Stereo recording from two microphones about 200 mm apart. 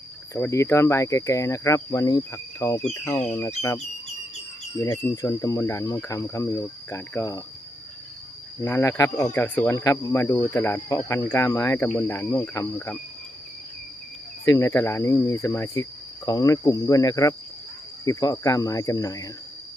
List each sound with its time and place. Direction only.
0.3 s speech: 15° left (ahead or behind)
4.8 s speech: 15° left (ahead or behind)
8.6 s speech: 15° left (ahead or behind)
14.4 s speech: 15° left (ahead or behind)